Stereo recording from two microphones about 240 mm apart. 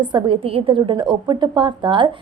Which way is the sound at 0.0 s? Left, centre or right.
Centre.